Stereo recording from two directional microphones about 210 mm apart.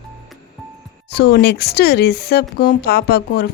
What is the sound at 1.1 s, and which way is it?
A woman's voice, 50° left (ahead or behind).